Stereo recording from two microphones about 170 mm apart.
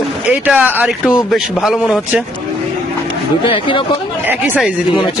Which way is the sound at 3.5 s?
30° left (ahead or behind).